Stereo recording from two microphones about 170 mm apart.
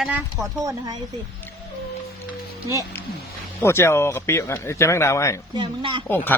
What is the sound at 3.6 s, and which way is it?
Speech, 15° left (ahead or behind).